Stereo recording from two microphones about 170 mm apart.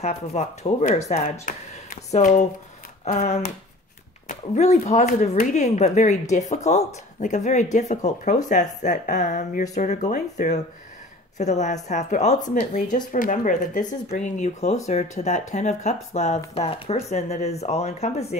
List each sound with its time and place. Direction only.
0.0 s speech: 40° left (ahead or behind)